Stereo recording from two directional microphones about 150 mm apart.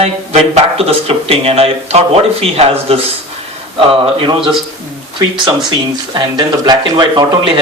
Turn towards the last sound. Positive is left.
turn(degrees=-30)  # may be behind; listen again after turning